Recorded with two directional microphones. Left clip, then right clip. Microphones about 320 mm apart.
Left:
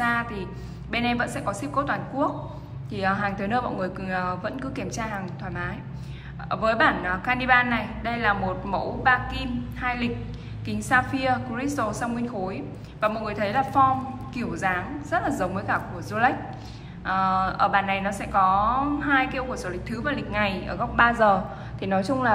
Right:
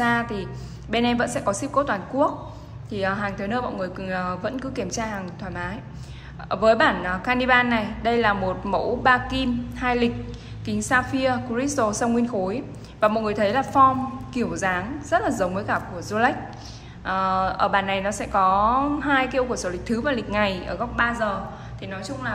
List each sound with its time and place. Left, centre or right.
0.0 s a woman's voice: centre